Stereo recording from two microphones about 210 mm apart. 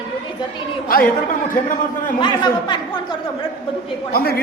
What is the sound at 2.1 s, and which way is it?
Speech, 20° left (ahead or behind).